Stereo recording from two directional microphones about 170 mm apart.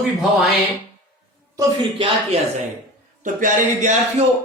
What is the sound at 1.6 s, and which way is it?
Speech, 30° right (ahead or behind).